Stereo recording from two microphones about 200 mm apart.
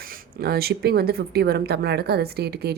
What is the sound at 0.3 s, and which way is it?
Speech, 50° right (ahead or behind).